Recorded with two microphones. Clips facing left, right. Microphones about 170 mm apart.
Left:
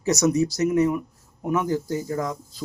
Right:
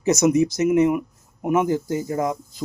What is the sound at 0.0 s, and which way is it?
A man's voice, 20° right (ahead or behind).